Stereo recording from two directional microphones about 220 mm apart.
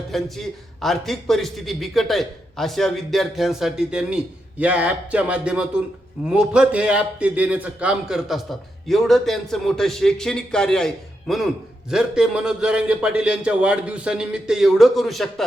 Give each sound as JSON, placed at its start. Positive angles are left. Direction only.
{"t": 0.1, "sound": "a man's voice", "side_deg": 0}